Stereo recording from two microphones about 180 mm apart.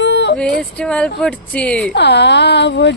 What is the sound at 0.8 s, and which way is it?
Speech, 5° left (ahead or behind).